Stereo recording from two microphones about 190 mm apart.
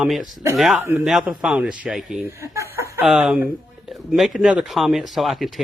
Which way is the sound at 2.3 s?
15° right (ahead or behind).